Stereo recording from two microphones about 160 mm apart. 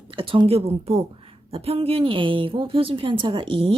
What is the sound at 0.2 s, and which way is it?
Speech, 35° right (ahead or behind).